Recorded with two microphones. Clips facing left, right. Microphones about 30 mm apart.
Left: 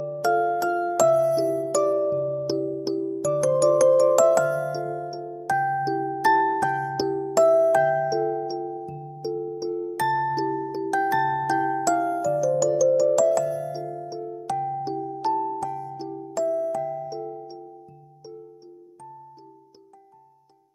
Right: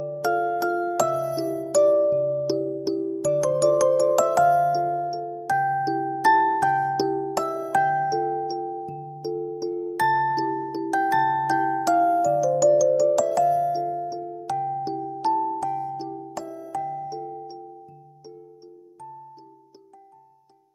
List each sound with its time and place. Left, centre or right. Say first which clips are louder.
0.0 s music: left 1 dB; centre
10.5 s music: even; centre
10.9 s music: right 2 dB; centre